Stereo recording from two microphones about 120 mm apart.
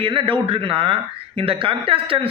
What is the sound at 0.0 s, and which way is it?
Speech, 45° right (ahead or behind).